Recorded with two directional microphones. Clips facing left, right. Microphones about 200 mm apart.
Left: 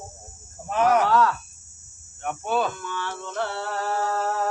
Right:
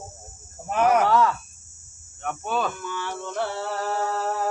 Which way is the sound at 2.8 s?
10° right (ahead or behind).